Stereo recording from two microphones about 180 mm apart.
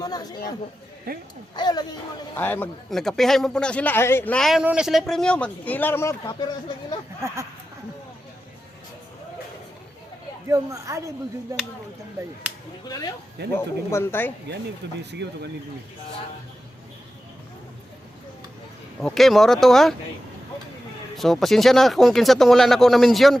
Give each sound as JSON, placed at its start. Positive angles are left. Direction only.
{"t": 0.0, "sound": "speech", "side_deg": 20}
{"t": 1.1, "sound": "speech", "side_deg": -55}
{"t": 1.5, "sound": "speech", "side_deg": 25}
{"t": 2.3, "sound": "a man's voice", "side_deg": 10}
{"t": 10.5, "sound": "a woman's voice", "side_deg": -15}
{"t": 13.6, "sound": "speech", "side_deg": 15}
{"t": 15.1, "sound": "speech", "side_deg": -70}
{"t": 18.9, "sound": "a man's voice", "side_deg": 0}
{"t": 21.2, "sound": "a man's voice", "side_deg": 0}